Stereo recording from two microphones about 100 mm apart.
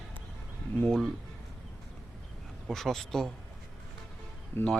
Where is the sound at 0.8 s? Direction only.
5° left (ahead or behind).